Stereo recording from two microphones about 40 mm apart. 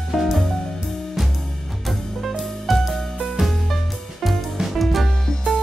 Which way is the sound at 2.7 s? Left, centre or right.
Centre.